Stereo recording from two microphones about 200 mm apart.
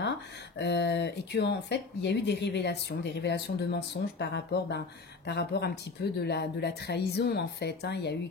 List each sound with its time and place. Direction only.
0.6 s speech: 55° left (ahead or behind)